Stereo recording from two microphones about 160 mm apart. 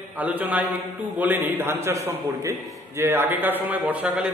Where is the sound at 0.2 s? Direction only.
10° right (ahead or behind).